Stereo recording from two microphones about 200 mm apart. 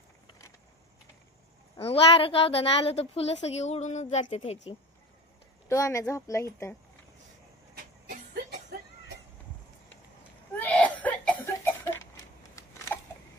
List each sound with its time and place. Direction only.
1.8 s a child's voice: 30° left (ahead or behind)
5.6 s speech: 15° left (ahead or behind)
8.1 s a sound: 40° right (ahead or behind)
10.6 s cough: 5° left (ahead or behind)